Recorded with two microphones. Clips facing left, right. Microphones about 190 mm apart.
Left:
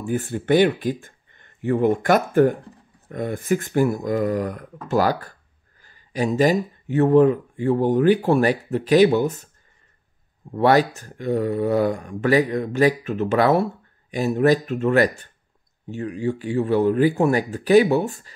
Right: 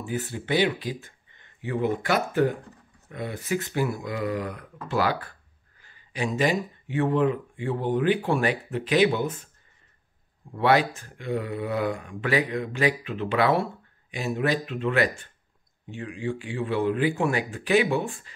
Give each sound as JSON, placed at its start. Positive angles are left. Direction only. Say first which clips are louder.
{"t": 0.0, "sound": "speech", "louder": "left 6 dB", "side_deg": 50}
{"t": 10.5, "sound": "speech", "louder": "left 5 dB", "side_deg": 40}